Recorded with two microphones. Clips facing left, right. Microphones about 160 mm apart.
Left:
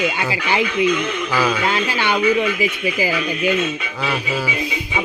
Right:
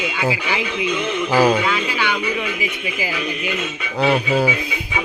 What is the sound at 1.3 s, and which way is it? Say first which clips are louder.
Speech: right 5 dB; 40° right (ahead or behind).